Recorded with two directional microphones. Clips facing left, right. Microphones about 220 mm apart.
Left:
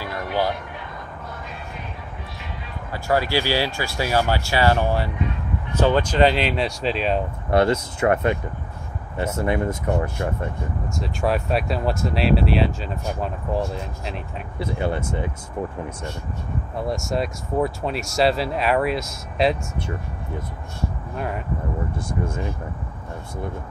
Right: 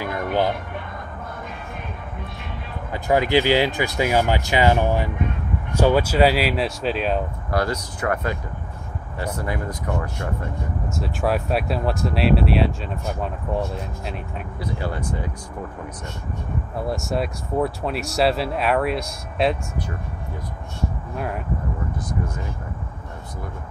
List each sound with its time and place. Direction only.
0.1 s music: 50° right (ahead or behind)
2.9 s speech: 20° right (ahead or behind); by 7.2 s centre (ahead or behind)
7.5 s speech: 25° left (ahead or behind)
11.0 s speech: centre (ahead or behind)
14.6 s speech: 25° left (ahead or behind)
16.7 s speech: centre (ahead or behind)
21.9 s speech: 25° left (ahead or behind)